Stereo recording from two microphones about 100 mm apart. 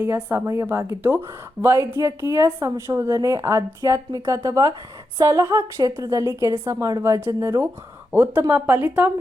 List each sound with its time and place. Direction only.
0.0 s a woman's voice: 20° right (ahead or behind)